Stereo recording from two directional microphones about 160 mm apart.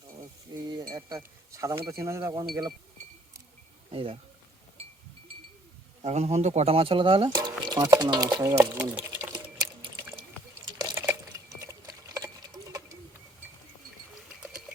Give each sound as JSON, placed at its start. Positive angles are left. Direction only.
{"t": 0.5, "sound": "chink", "side_deg": -25}
{"t": 0.9, "sound": "speech", "side_deg": -20}
{"t": 3.9, "sound": "speech", "side_deg": -35}
{"t": 6.0, "sound": "speech", "side_deg": -40}
{"t": 9.0, "sound": "typing", "side_deg": -15}
{"t": 9.3, "sound": "water", "side_deg": -20}
{"t": 10.8, "sound": "a sound", "side_deg": -20}